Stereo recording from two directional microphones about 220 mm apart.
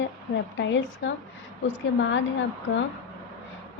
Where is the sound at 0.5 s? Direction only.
55° left (ahead or behind).